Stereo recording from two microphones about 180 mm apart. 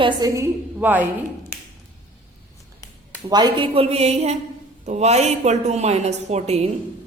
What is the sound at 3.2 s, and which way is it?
A woman's voice, 25° right (ahead or behind).